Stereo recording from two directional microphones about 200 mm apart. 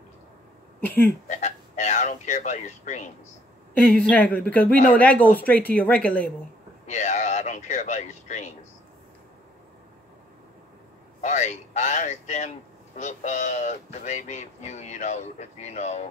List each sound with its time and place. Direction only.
1.3 s speech: 35° left (ahead or behind)
4.0 s speech: 5° left (ahead or behind)
4.7 s speech: 40° left (ahead or behind)
5.0 s speech: 10° left (ahead or behind)
6.9 s speech: 35° left (ahead or behind)
11.1 s speech: 35° left (ahead or behind)